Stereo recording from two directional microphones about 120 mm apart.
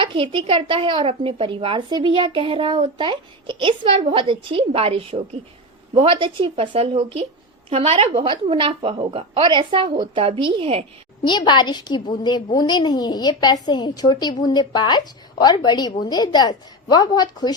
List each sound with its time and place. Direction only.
0.0 s speech: 45° right (ahead or behind)
5.9 s speech: 45° right (ahead or behind)
11.3 s a woman's voice: 40° left (ahead or behind)